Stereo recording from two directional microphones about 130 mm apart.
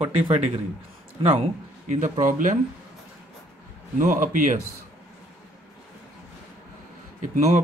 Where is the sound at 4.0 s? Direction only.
85° right.